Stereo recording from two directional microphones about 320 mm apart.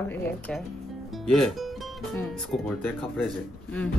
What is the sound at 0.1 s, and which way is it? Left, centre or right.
Speech, centre.